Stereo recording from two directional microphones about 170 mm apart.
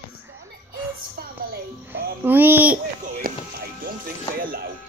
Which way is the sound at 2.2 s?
10° right (ahead or behind).